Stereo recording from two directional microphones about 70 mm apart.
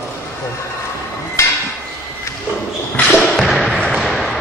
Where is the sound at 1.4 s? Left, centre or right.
Left.